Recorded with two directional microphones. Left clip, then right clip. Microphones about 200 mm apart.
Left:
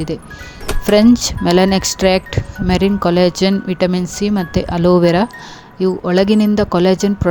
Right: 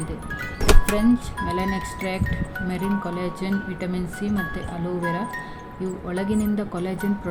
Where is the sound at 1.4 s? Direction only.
55° left (ahead or behind).